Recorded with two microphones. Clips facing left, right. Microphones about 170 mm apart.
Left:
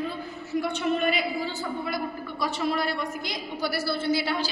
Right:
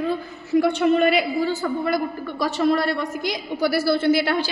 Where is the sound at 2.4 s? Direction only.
75° right (ahead or behind).